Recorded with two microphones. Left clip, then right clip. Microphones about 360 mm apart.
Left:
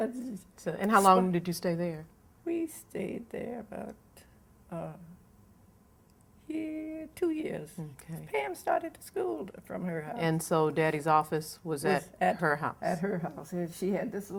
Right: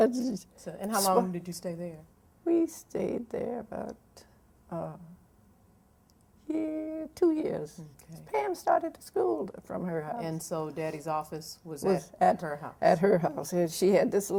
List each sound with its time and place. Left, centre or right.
0.5 s speech: left
2.4 s speech: right
6.5 s speech: right
7.8 s speech: left
8.3 s speech: right
10.2 s speech: left
12.8 s a woman's voice: right